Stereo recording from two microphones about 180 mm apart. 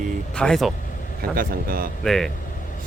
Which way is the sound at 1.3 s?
55° right (ahead or behind).